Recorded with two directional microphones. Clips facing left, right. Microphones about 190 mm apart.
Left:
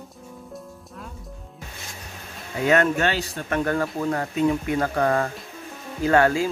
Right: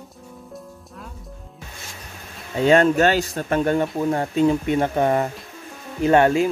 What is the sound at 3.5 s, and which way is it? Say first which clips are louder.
Speech: right 3 dB; 25° right (ahead or behind).